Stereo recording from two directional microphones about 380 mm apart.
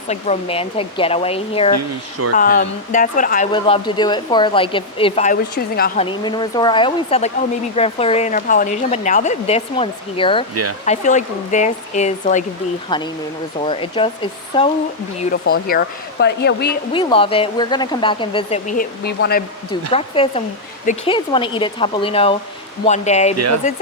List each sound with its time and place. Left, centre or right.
0.1 s speech: centre
6.1 s speech: centre
10.5 s speech: right
10.8 s speech: centre
16.9 s speech: centre